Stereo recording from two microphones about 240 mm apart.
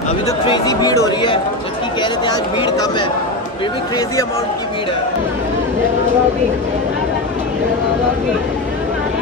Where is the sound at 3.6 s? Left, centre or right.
Centre.